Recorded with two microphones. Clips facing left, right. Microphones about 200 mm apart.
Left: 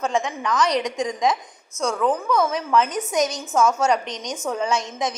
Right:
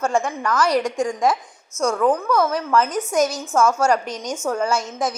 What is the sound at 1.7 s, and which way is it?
Speech, 30° left (ahead or behind).